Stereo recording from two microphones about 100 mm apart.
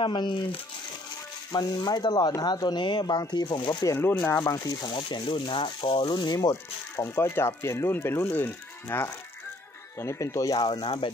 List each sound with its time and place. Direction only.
0.0 s speech: 50° left (ahead or behind)
1.5 s speech: 40° left (ahead or behind)
3.8 s speech: 30° left (ahead or behind)
4.9 s speech: 55° left (ahead or behind)
6.5 s speech: 25° left (ahead or behind)
10.6 s speech: 50° left (ahead or behind)